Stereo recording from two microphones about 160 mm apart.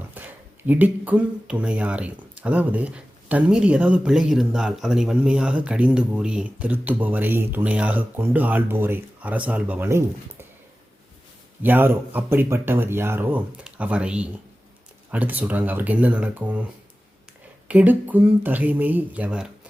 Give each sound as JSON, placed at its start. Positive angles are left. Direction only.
{"t": 0.1, "sound": "speech", "side_deg": -10}
{"t": 11.6, "sound": "speech", "side_deg": -10}
{"t": 17.7, "sound": "speech", "side_deg": -10}